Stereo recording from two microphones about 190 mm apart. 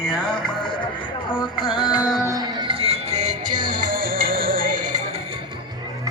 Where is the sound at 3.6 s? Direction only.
45° right (ahead or behind).